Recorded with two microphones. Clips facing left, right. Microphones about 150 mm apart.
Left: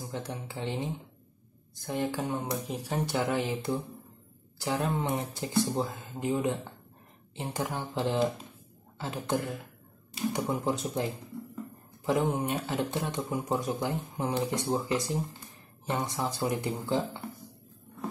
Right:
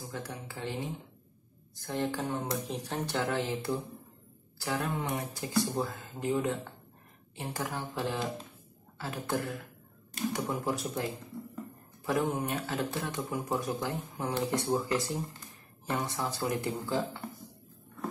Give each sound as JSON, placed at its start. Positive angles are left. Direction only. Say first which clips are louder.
{"t": 0.1, "sound": "speech", "louder": "left 4 dB", "side_deg": 20}
{"t": 1.9, "sound": "speech", "louder": "left 2 dB", "side_deg": 15}